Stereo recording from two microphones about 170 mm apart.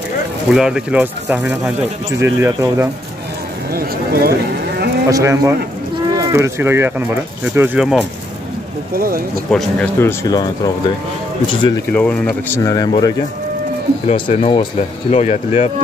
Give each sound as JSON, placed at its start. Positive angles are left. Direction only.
{"t": 0.6, "sound": "speech", "side_deg": -5}
{"t": 2.1, "sound": "speech", "side_deg": -15}
{"t": 3.7, "sound": "speech", "side_deg": -65}
{"t": 5.1, "sound": "speech", "side_deg": -20}
{"t": 8.9, "sound": "speech", "side_deg": -55}
{"t": 9.5, "sound": "speech", "side_deg": 5}
{"t": 9.9, "sound": "speech", "side_deg": 20}
{"t": 11.9, "sound": "speech", "side_deg": 5}
{"t": 14.0, "sound": "speech", "side_deg": 35}